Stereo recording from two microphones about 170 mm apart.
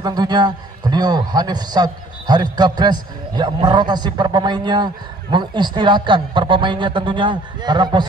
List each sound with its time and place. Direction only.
0.0 s a man's voice: 25° right (ahead or behind)